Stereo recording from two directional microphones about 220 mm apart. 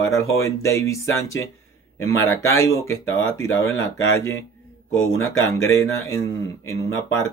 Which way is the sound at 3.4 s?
15° left (ahead or behind).